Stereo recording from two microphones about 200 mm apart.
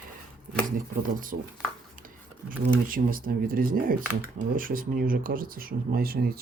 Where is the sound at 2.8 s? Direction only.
45° right (ahead or behind).